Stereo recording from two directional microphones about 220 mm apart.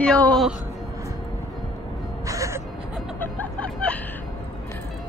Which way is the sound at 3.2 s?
5° left (ahead or behind).